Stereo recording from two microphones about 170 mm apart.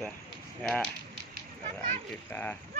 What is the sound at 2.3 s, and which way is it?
Mantra, 10° left (ahead or behind).